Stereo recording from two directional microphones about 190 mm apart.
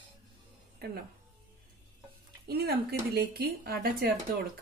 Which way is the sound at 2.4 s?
55° right (ahead or behind).